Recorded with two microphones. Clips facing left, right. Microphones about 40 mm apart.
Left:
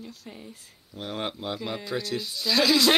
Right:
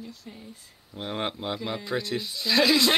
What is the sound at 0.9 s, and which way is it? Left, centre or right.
Speech, centre.